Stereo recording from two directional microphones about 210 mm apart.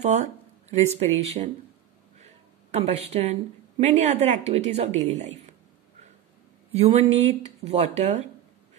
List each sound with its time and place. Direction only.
0.0 s speech: 35° right (ahead or behind)
6.7 s speech: 30° right (ahead or behind)